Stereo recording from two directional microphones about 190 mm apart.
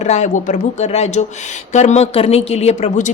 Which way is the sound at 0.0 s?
35° left (ahead or behind).